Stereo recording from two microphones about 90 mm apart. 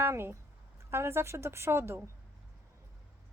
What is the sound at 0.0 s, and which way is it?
A woman's voice, 25° right (ahead or behind).